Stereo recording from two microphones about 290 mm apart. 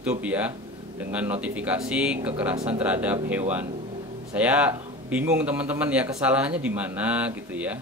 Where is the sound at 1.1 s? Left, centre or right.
Centre.